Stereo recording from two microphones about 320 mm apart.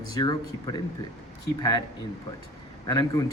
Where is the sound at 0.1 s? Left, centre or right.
Centre.